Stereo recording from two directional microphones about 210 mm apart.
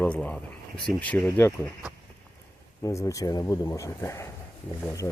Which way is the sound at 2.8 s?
15° left (ahead or behind).